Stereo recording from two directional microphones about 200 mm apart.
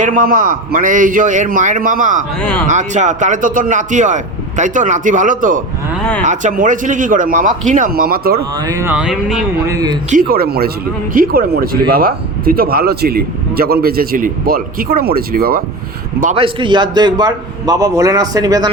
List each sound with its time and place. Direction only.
0.0 s speech: 45° right (ahead or behind)
2.4 s speech: 5° left (ahead or behind)
2.6 s speech: 35° right (ahead or behind)
8.6 s speech: 15° right (ahead or behind)
9.6 s a man's voice: 20° right (ahead or behind)
10.1 s speech: 45° right (ahead or behind)
16.2 s a man's voice: 30° right (ahead or behind)